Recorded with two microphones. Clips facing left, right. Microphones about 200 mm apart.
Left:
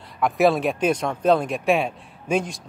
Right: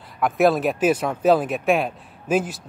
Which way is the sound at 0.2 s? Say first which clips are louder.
Right 1 dB; centre (ahead or behind).